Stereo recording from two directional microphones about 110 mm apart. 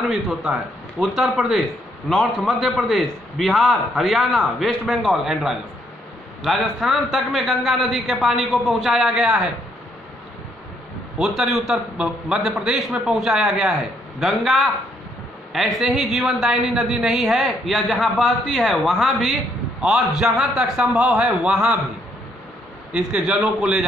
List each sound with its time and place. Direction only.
0.1 s a man's voice: 5° right (ahead or behind)
11.1 s a man's voice: 5° right (ahead or behind)
22.9 s a man's voice: 10° right (ahead or behind)